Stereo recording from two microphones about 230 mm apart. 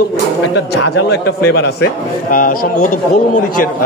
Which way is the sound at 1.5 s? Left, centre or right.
Left.